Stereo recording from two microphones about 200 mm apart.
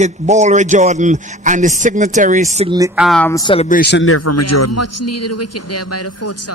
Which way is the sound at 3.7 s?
55° left (ahead or behind).